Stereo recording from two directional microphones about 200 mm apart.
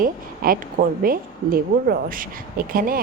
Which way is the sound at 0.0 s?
45° right (ahead or behind).